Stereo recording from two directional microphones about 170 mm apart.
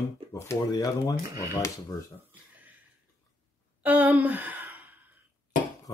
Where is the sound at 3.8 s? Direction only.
10° right (ahead or behind).